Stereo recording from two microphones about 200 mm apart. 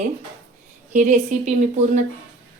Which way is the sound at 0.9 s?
40° right (ahead or behind).